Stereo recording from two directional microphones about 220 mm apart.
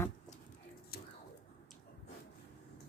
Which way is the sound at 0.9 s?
45° left (ahead or behind).